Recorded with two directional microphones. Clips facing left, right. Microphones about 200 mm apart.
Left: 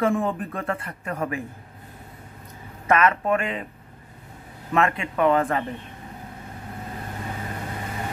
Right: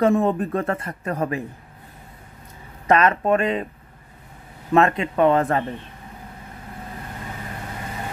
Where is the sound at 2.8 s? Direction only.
35° right (ahead or behind).